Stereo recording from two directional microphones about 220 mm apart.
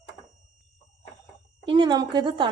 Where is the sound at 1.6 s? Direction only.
20° right (ahead or behind).